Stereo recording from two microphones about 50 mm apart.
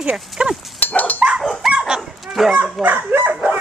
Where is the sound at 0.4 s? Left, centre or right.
Centre.